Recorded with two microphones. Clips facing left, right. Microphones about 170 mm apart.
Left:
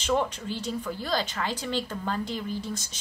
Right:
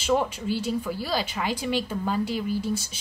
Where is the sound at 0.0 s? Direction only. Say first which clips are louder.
Right 2 dB; 10° right (ahead or behind).